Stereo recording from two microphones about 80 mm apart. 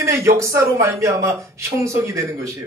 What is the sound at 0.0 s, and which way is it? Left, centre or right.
Speech, right.